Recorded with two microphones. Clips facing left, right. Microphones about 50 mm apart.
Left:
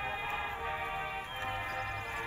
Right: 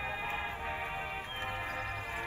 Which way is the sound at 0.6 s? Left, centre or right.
Centre.